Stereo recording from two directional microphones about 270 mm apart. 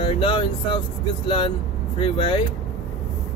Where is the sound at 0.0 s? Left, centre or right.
Centre.